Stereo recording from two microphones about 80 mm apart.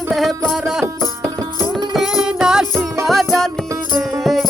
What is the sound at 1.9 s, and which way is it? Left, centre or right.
Music, centre.